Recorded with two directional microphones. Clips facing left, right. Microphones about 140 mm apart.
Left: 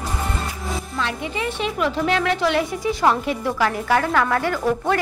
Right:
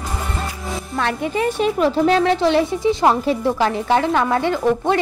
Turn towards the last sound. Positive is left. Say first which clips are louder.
# right 3 dB
turn(degrees=-25)  # may be behind; listen again after turning